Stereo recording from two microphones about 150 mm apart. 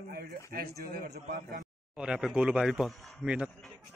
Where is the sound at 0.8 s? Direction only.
80° right.